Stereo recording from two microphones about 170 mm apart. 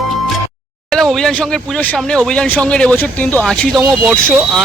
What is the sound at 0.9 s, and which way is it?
Speech, 5° left (ahead or behind).